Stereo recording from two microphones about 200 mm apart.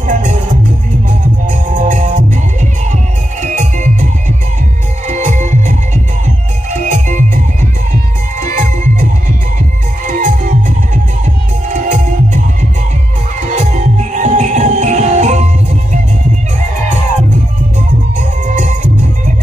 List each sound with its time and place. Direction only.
0.0 s music: 40° right (ahead or behind)
1.5 s music: 40° right (ahead or behind)
8.4 s music: 40° right (ahead or behind)
10.0 s music: 40° right (ahead or behind)
11.7 s music: 40° right (ahead or behind)
13.7 s music: 35° right (ahead or behind)
18.5 s music: 40° right (ahead or behind)